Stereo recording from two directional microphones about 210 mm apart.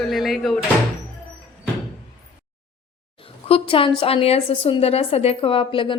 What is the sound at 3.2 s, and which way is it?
A woman's voice, 25° left (ahead or behind).